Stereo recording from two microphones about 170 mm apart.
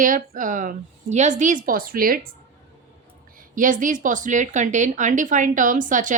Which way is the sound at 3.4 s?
50° right (ahead or behind).